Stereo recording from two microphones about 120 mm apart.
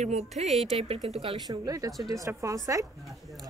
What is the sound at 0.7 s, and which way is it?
Speech, 60° right (ahead or behind).